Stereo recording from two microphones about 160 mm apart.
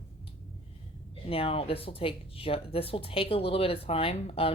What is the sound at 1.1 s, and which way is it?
Speech, 35° left (ahead or behind).